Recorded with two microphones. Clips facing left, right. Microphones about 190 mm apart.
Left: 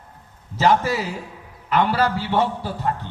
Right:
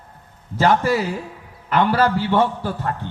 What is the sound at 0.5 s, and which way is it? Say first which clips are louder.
A man's voice: right 2 dB; 55° right (ahead or behind).